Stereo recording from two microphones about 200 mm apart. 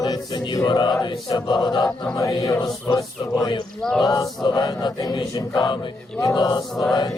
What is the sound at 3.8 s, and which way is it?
Speech, centre (ahead or behind).